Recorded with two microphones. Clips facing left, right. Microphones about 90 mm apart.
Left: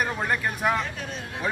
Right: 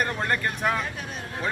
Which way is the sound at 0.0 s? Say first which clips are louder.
Even; 5° left (ahead or behind).